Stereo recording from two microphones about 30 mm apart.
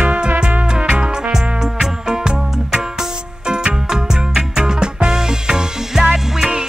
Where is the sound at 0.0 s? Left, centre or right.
Right.